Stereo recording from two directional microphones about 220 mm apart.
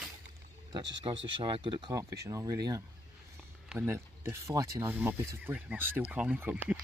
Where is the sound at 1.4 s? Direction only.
20° right (ahead or behind); by 6.8 s 5° right (ahead or behind).